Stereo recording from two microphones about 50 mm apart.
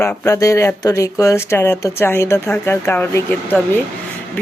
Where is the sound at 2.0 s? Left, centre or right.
Left.